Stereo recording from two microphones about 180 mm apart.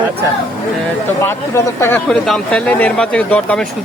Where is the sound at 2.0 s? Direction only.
5° left (ahead or behind).